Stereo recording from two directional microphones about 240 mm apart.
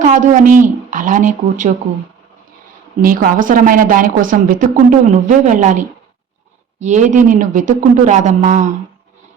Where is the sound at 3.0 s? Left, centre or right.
Right.